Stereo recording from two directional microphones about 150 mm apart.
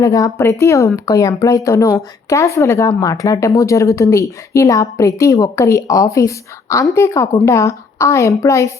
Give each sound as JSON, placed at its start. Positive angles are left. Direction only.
{"t": 0.0, "sound": "a woman's voice", "side_deg": 20}